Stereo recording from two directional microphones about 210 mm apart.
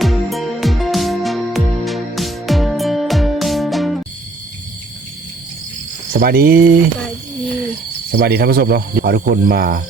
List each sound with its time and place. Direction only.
0.0 s music: centre (ahead or behind)
6.1 s speech: 45° right (ahead or behind)
8.1 s speech: 50° right (ahead or behind)